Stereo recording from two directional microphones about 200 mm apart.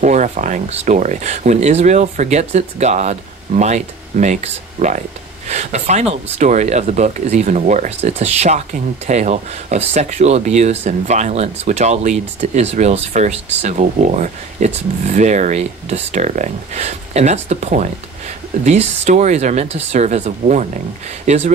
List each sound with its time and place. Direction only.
0.0 s speech: 35° right (ahead or behind)